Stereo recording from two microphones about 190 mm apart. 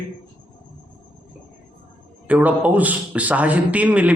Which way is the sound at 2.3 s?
5° right (ahead or behind).